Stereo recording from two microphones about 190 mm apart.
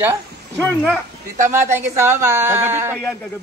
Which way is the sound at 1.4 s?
15° right (ahead or behind).